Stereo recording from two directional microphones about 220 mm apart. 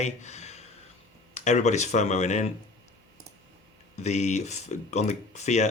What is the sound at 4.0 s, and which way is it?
Speech, 30° left (ahead or behind).